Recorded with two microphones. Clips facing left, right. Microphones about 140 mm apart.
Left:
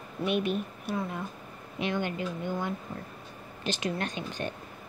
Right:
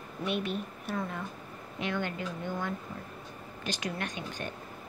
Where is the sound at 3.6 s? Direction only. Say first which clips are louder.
Left 4 dB; 25° left (ahead or behind).